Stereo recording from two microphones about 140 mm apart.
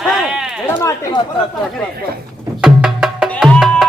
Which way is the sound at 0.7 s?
15° left (ahead or behind).